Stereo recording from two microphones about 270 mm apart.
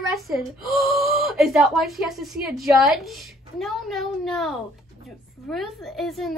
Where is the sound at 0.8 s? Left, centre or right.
Centre.